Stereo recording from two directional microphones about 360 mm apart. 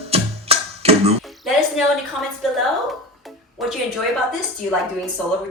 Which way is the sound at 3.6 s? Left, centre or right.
Centre.